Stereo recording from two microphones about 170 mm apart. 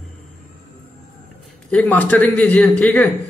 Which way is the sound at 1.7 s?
10° left (ahead or behind).